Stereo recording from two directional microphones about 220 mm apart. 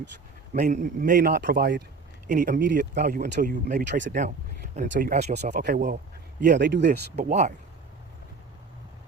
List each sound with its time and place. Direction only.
0.5 s a man's voice: 35° right (ahead or behind)
2.2 s a man's voice: 35° right (ahead or behind); by 4.1 s 50° right (ahead or behind)
4.7 s a man's voice: 40° right (ahead or behind)
5.6 s speech: 45° right (ahead or behind)
7.2 s a man's voice: 30° right (ahead or behind)